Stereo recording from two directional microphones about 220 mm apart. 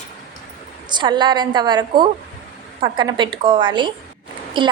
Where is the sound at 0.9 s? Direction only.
20° right (ahead or behind).